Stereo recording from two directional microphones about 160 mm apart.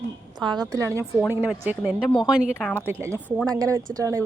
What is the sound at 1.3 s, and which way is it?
A woman's voice, 10° right (ahead or behind).